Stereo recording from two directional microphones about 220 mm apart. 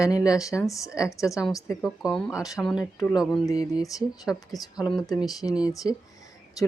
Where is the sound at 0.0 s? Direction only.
15° left (ahead or behind).